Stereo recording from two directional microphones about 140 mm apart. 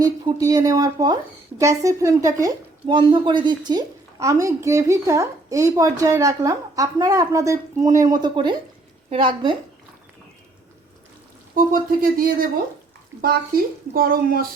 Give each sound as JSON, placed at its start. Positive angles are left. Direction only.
{"t": 0.0, "sound": "a woman's voice", "side_deg": -25}
{"t": 2.8, "sound": "a woman's voice", "side_deg": -35}
{"t": 11.5, "sound": "speech", "side_deg": -90}
{"t": 13.9, "sound": "speech", "side_deg": -90}